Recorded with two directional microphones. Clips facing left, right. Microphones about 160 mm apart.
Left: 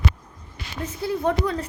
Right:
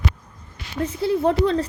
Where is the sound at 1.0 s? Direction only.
25° right (ahead or behind).